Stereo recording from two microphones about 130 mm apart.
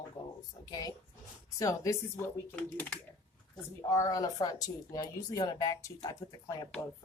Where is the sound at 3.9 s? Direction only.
25° left (ahead or behind).